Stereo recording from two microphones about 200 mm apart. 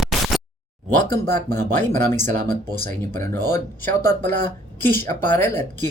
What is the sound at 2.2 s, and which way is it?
Speech, 40° right (ahead or behind).